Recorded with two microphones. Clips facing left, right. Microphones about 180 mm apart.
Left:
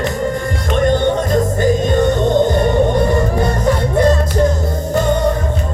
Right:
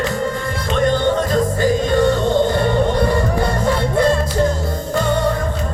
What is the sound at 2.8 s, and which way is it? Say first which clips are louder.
Music: left 2 dB; 45° left (ahead or behind).